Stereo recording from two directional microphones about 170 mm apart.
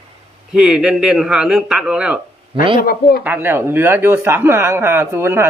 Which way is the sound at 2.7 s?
60° left (ahead or behind).